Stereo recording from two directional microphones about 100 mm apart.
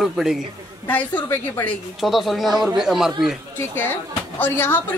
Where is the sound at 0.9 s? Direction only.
15° left (ahead or behind).